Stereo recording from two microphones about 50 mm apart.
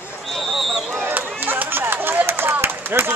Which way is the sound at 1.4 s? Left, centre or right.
Right.